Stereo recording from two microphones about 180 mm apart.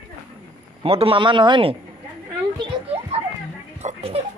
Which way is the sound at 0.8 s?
30° right (ahead or behind).